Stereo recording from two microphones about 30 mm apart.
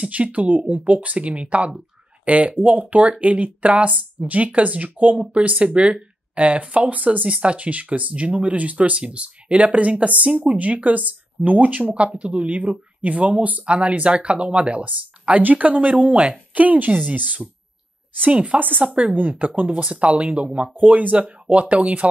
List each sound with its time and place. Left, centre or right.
0.1 s speech: right
2.2 s speech: right
5.4 s speech: right
11.9 s speech: right
12.4 s speech: right
13.7 s speech: right
18.3 s speech: right
19.8 s speech: right
20.7 s speech: right
21.2 s speech: right